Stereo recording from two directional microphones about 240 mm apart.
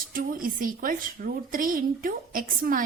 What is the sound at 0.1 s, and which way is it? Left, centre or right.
A woman's voice, right.